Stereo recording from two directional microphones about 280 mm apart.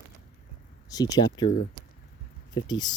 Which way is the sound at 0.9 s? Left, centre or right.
Centre.